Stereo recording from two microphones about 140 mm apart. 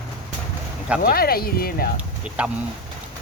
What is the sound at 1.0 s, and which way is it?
Speech, 90° left.